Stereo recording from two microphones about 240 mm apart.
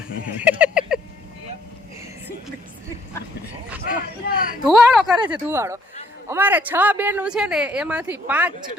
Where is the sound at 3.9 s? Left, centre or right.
Left.